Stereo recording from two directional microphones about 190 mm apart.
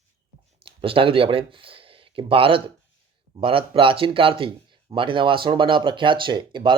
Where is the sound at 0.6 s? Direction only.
30° right (ahead or behind).